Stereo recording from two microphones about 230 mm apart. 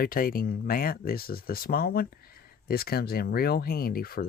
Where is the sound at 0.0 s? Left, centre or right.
Left.